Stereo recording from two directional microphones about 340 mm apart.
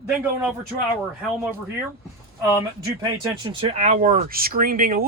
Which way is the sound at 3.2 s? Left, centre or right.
Centre.